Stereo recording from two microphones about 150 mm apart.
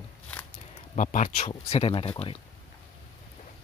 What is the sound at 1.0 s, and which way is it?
Speech, 60° left (ahead or behind).